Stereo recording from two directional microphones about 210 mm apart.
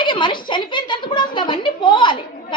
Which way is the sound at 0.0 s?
20° left (ahead or behind).